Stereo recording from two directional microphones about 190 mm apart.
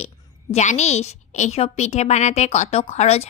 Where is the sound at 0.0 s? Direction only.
35° left (ahead or behind).